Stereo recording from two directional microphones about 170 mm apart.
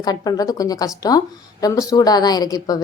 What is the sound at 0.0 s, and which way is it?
A woman's voice, 20° left (ahead or behind).